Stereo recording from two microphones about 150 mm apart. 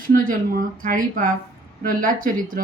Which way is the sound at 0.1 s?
70° right (ahead or behind).